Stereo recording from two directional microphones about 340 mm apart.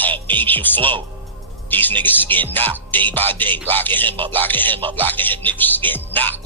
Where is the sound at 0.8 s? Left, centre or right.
Centre.